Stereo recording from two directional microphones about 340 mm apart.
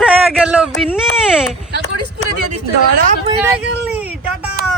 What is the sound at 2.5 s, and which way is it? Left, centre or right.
Speech, right.